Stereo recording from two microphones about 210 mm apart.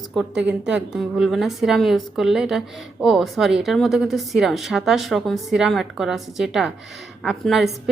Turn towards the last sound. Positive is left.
turn(degrees=0)  # may be behind; listen again after turning